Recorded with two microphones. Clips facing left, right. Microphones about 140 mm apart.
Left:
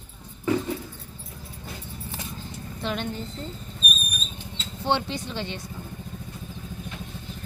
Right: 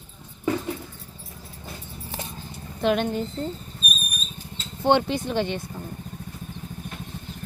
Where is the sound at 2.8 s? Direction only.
55° right (ahead or behind).